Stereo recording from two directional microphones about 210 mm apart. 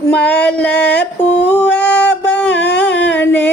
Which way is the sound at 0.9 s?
55° left (ahead or behind).